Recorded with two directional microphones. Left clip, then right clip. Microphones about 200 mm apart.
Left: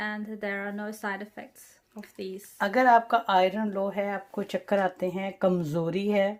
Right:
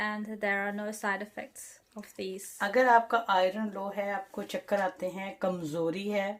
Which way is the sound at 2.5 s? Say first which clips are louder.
Left 3 dB; 60° left (ahead or behind).